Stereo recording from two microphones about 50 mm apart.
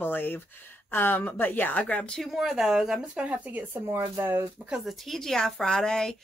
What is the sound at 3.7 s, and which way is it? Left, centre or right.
Speech, right.